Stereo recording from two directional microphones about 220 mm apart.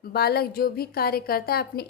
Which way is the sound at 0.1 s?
45° left (ahead or behind).